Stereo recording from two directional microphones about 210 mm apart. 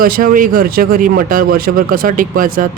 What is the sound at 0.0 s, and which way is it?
Speech, 40° right (ahead or behind).